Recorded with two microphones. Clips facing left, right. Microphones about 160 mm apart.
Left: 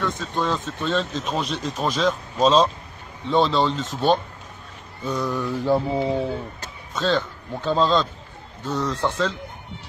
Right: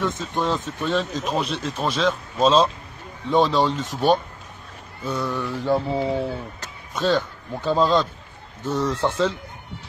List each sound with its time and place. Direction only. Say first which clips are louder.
0.2 s speech: right 1 dB; 15° right (ahead or behind)
3.3 s speech: right 1 dB; 10° right (ahead or behind)
5.0 s speech: left 1 dB; centre (ahead or behind)
6.9 s speech: right 1 dB; 15° right (ahead or behind)